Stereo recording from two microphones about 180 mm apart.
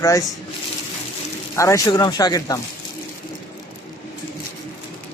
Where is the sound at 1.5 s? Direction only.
15° left (ahead or behind).